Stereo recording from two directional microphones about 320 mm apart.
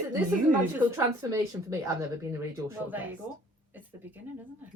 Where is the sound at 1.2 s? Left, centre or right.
Centre.